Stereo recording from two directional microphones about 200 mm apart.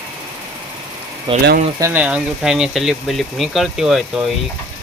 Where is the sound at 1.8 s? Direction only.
10° right (ahead or behind).